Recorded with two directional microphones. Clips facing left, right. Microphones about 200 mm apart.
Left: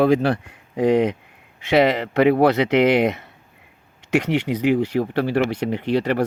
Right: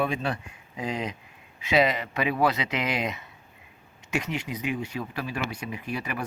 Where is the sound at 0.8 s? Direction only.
70° left (ahead or behind).